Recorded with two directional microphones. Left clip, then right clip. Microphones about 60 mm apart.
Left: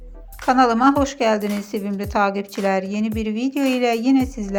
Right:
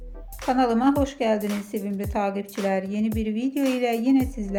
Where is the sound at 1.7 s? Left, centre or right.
Left.